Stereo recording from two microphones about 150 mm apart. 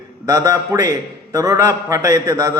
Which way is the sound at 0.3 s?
25° right (ahead or behind).